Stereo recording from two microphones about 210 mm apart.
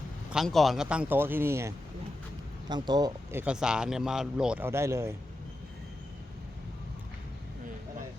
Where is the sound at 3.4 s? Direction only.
5° right (ahead or behind).